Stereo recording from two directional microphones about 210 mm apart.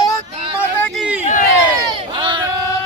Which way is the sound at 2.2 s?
20° right (ahead or behind).